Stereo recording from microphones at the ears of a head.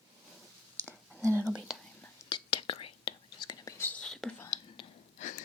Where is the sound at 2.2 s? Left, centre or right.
Left.